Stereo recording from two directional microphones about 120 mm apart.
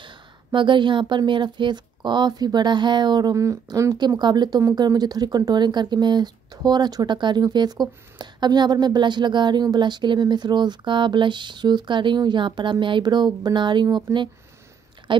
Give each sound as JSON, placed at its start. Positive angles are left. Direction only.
{"t": 0.0, "sound": "speech", "side_deg": -40}